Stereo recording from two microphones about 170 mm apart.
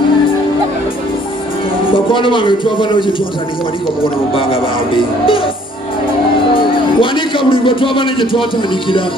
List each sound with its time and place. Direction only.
1.9 s speech: 30° left (ahead or behind)
4.3 s speech: 30° left (ahead or behind)
6.5 s a man's voice: 30° left (ahead or behind)